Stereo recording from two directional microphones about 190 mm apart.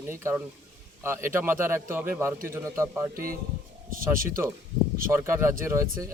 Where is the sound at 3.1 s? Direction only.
50° right (ahead or behind).